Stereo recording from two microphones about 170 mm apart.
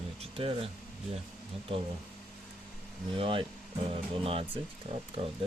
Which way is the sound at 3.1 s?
30° right (ahead or behind).